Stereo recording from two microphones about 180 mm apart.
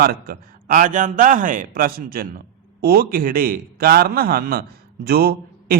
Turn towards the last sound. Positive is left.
turn(degrees=-60)  # may be behind; listen again after turning